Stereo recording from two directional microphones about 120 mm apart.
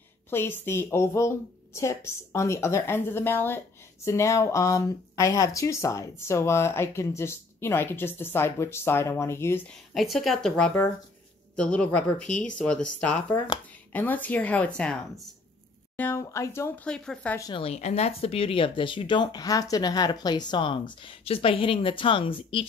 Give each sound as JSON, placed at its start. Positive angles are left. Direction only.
{"t": 0.3, "sound": "a woman's voice", "side_deg": 20}
{"t": 9.9, "sound": "a woman's voice", "side_deg": 0}
{"t": 16.0, "sound": "a woman's voice", "side_deg": 20}
{"t": 16.8, "sound": "speech", "side_deg": 5}
{"t": 17.6, "sound": "speech", "side_deg": 65}